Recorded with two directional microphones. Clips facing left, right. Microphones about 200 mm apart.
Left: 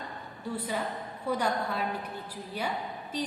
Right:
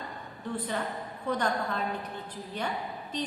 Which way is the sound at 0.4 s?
10° left (ahead or behind).